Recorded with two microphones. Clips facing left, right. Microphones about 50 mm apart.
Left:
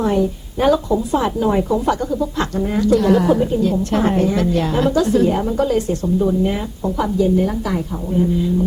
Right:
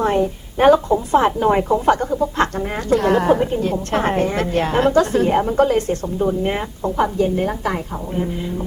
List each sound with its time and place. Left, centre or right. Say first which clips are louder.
0.0 s speech: even; right